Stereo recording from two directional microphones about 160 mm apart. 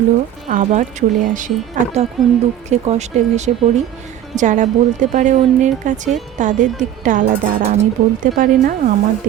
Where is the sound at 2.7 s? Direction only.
45° right (ahead or behind).